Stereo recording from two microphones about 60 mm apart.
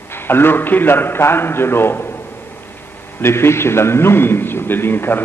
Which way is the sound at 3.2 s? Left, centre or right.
Left.